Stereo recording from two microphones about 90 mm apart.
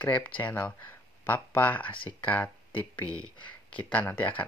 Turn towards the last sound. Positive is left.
turn(degrees=20)  # may be behind; listen again after turning